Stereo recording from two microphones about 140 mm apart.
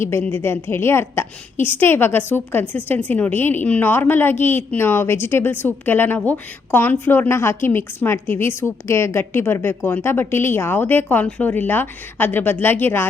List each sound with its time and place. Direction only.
0.0 s a woman's voice: 15° left (ahead or behind)